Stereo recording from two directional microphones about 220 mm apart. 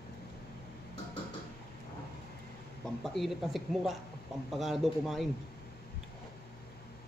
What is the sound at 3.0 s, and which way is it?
Speech, centre (ahead or behind).